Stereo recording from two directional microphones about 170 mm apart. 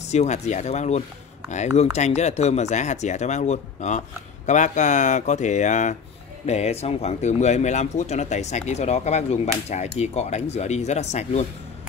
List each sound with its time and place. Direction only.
0.1 s speech: 40° left (ahead or behind)